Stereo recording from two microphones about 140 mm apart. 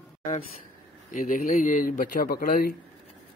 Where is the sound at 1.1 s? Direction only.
65° left (ahead or behind); by 2.8 s 90° left.